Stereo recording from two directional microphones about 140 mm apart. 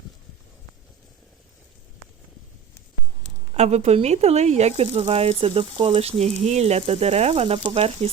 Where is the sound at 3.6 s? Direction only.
50° right (ahead or behind).